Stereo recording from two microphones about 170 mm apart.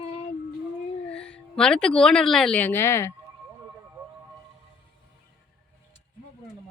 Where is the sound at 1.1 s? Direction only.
5° left (ahead or behind).